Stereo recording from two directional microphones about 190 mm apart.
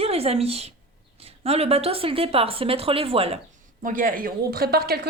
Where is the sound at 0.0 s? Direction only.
30° right (ahead or behind).